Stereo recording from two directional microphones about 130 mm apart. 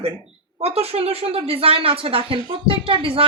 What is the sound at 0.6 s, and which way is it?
Speech, 50° right (ahead or behind).